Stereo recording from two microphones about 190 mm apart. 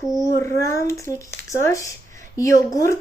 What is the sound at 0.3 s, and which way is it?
A child's voice, 15° left (ahead or behind).